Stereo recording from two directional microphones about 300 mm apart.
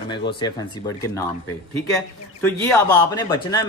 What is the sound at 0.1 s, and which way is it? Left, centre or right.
Speech, centre.